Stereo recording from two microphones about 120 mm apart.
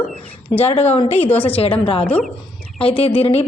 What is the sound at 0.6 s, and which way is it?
Speech, 55° left (ahead or behind).